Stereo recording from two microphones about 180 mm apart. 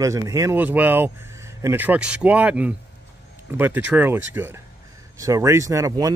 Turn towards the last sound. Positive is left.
turn(degrees=-20)  # may be behind; listen again after turning